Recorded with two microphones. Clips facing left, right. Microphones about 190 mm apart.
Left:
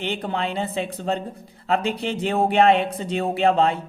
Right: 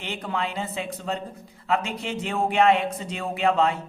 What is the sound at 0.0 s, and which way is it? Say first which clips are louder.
Speech: left 4 dB; 30° left (ahead or behind).